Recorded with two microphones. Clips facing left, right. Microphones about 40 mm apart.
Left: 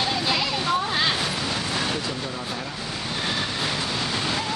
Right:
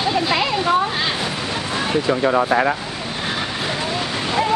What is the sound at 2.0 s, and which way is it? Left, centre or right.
Speech, right.